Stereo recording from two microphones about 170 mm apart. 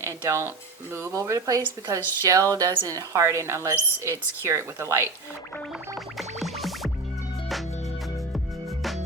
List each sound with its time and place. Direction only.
0.0 s speech: 15° right (ahead or behind)
6.1 s music: centre (ahead or behind)